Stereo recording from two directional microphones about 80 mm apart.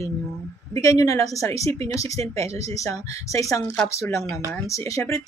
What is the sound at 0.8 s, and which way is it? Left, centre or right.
Speech, left.